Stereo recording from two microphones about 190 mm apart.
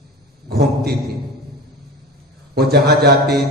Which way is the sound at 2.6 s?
55° right (ahead or behind).